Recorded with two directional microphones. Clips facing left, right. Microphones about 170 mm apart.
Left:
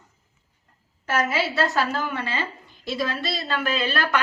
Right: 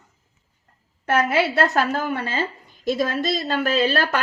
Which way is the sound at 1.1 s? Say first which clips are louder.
Right 4 dB; 55° right (ahead or behind).